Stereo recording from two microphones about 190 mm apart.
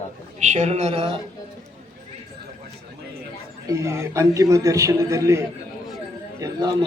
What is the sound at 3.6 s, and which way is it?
A man's voice, 15° right (ahead or behind).